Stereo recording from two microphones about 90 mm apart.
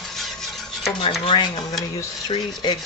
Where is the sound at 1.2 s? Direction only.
60° left (ahead or behind).